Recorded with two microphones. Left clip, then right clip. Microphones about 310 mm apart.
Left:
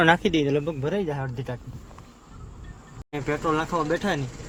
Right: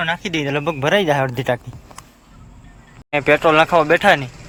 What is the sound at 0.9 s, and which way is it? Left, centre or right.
Speech, right.